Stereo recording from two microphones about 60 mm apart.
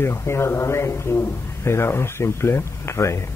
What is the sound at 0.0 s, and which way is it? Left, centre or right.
A man's voice, left.